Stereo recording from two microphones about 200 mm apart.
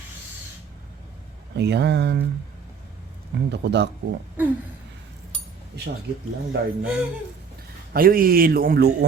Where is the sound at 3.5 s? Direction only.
55° right (ahead or behind).